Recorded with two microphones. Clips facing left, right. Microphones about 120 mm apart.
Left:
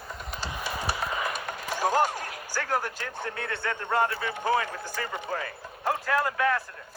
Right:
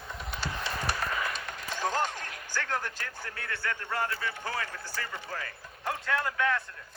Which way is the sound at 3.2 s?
25° left (ahead or behind).